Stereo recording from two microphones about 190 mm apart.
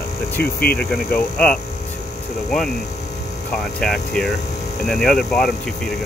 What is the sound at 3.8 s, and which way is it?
Speech, 5° left (ahead or behind).